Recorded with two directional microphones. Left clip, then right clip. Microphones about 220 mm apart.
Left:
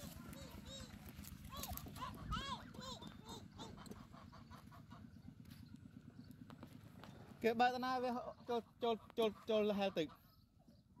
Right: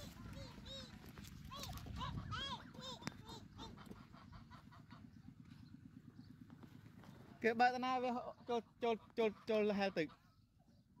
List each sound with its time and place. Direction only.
2.0 s dog: 30° right (ahead or behind)
7.3 s a man's voice: 10° right (ahead or behind)